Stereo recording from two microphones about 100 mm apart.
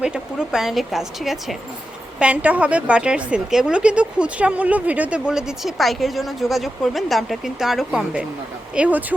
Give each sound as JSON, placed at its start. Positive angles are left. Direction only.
{"t": 0.0, "sound": "a woman's voice", "side_deg": -10}
{"t": 2.1, "sound": "a woman's voice", "side_deg": -15}